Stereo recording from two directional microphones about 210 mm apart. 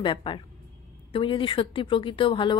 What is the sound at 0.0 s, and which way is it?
A woman's voice, 25° left (ahead or behind).